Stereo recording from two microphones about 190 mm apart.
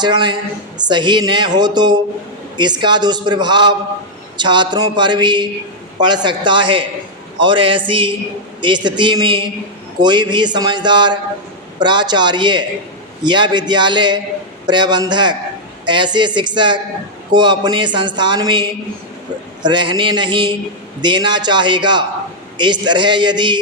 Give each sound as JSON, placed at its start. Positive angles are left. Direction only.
{"t": 0.0, "sound": "speech", "side_deg": -25}